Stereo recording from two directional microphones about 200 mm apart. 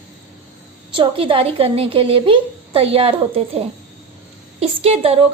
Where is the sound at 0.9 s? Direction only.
25° right (ahead or behind).